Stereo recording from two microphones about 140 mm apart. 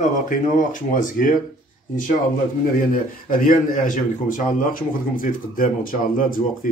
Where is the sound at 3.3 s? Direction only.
75° left (ahead or behind).